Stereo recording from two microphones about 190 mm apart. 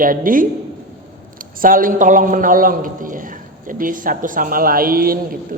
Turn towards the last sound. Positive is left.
turn(degrees=-50)  # may be behind; listen again after turning